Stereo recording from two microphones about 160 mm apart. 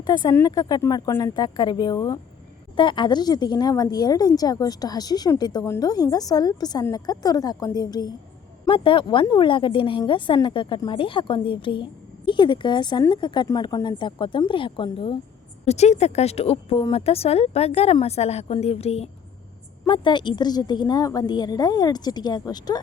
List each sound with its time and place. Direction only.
0.0 s a woman's voice: 25° left (ahead or behind)
15.6 s speech: 45° left (ahead or behind)
19.8 s a woman's voice: 30° left (ahead or behind)